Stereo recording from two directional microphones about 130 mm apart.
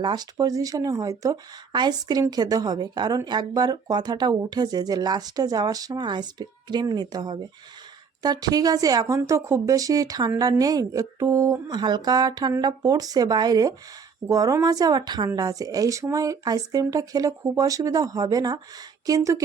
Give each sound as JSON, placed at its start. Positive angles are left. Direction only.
{"t": 0.0, "sound": "a woman's voice", "side_deg": -35}